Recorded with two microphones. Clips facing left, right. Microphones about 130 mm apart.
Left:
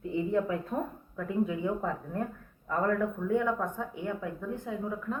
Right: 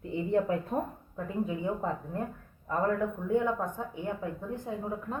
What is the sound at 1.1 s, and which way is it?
Speech, 25° right (ahead or behind).